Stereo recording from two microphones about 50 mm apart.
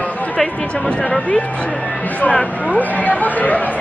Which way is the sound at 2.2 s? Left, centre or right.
Left.